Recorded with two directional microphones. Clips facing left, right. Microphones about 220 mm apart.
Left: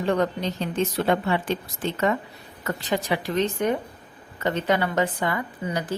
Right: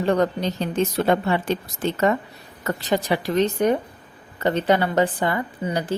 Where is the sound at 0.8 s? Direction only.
40° right (ahead or behind).